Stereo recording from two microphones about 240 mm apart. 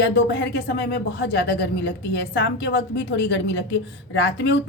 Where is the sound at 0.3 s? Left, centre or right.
Left.